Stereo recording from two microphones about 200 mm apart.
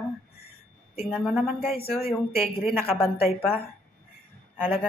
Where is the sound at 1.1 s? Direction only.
5° right (ahead or behind).